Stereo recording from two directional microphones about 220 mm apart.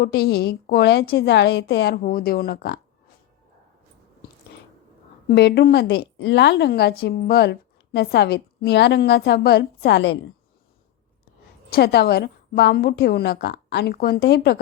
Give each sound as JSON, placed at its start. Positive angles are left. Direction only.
{"t": 0.0, "sound": "a woman's voice", "side_deg": 45}
{"t": 5.3, "sound": "a woman's voice", "side_deg": 45}
{"t": 11.7, "sound": "a woman's voice", "side_deg": 45}